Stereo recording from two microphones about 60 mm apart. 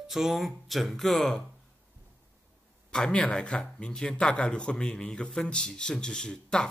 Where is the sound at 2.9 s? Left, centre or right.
Centre.